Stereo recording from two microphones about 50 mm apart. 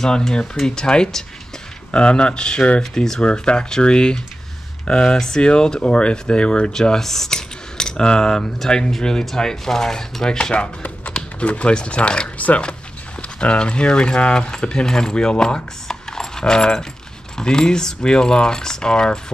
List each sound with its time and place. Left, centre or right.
0.0 s speech: centre